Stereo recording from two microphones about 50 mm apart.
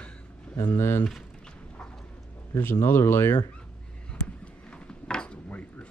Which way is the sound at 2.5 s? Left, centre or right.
Left.